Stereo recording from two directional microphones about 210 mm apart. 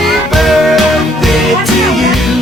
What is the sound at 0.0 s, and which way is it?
Music, centre (ahead or behind).